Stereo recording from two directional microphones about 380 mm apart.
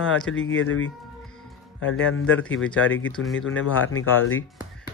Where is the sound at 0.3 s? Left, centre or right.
Left.